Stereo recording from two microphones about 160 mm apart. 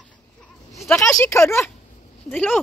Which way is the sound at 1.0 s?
15° left (ahead or behind).